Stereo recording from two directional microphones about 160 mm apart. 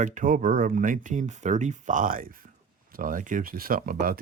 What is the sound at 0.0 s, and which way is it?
Speech, 55° right (ahead or behind).